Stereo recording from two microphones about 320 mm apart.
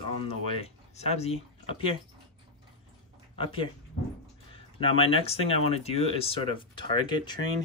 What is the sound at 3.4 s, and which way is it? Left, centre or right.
Speech, centre.